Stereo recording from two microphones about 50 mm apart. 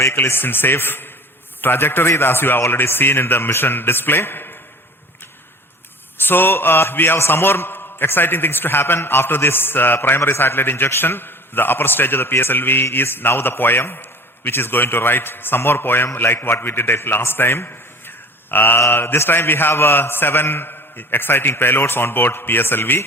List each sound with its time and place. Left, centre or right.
0.2 s a man's voice: left
6.2 s a man's voice: left